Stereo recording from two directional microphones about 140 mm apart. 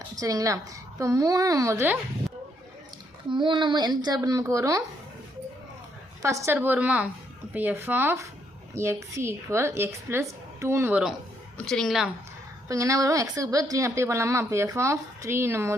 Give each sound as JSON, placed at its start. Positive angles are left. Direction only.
{"t": 0.2, "sound": "speech", "side_deg": -25}
{"t": 3.2, "sound": "speech", "side_deg": -35}
{"t": 6.2, "sound": "a woman's voice", "side_deg": -20}
{"t": 11.5, "sound": "a woman's voice", "side_deg": 5}
{"t": 12.6, "sound": "speech", "side_deg": -25}